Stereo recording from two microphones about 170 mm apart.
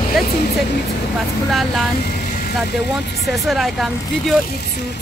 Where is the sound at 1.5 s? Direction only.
Centre (ahead or behind).